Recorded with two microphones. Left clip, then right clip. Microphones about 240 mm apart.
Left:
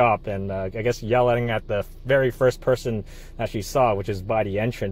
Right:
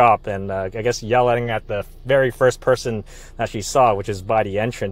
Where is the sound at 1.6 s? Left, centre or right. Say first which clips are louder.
Right 1 dB; centre.